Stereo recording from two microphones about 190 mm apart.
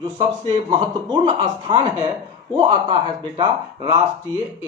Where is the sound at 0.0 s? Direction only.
25° right (ahead or behind).